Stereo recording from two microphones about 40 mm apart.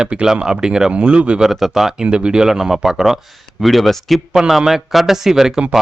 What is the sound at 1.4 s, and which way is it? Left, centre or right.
Speech, centre.